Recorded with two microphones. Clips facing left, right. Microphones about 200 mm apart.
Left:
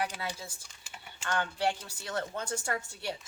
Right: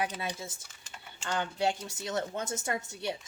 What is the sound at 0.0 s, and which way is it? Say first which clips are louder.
A woman's voice: right 1 dB; 20° right (ahead or behind).